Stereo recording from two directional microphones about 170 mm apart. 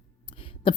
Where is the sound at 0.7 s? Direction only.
30° left (ahead or behind).